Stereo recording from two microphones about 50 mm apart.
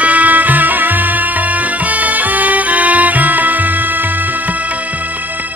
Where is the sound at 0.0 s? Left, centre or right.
Right.